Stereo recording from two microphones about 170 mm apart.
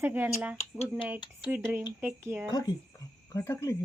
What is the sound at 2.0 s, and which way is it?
Speech, 15° right (ahead or behind).